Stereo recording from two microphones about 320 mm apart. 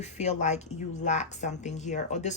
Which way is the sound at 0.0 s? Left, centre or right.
Left.